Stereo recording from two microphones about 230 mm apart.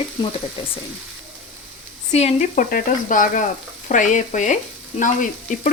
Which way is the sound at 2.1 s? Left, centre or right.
Left.